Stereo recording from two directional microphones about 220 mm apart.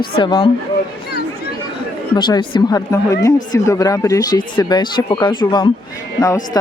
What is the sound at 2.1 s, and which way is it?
Speech, 20° left (ahead or behind).